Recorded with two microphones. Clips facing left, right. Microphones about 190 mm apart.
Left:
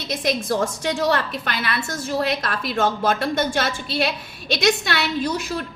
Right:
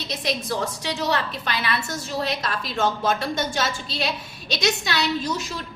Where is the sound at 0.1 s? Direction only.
50° left (ahead or behind).